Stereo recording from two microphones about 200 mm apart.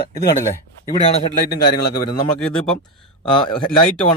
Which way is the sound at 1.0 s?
30° left (ahead or behind).